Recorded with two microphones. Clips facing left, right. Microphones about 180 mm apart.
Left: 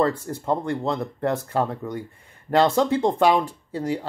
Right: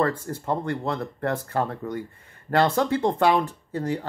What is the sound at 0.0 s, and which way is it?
Speech, 15° left (ahead or behind).